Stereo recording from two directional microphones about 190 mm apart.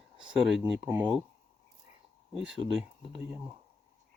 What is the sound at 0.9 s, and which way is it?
Speech, 20° right (ahead or behind).